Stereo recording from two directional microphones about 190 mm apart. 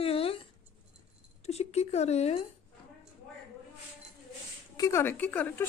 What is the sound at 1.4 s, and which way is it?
Speech, 35° left (ahead or behind).